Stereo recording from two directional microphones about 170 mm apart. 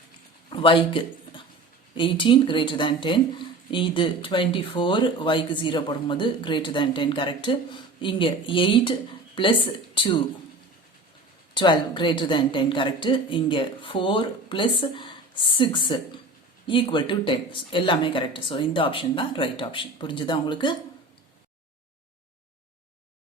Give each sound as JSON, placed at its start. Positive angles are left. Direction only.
{"t": 0.5, "sound": "speech", "side_deg": 30}
{"t": 11.5, "sound": "speech", "side_deg": 25}